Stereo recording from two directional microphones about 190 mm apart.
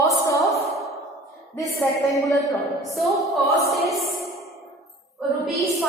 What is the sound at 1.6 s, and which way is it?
Speech, 15° left (ahead or behind).